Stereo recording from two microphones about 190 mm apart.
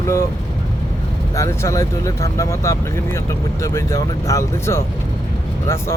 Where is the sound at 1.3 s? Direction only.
15° left (ahead or behind).